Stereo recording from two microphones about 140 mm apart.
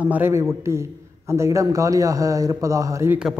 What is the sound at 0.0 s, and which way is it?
A man's voice, 15° right (ahead or behind).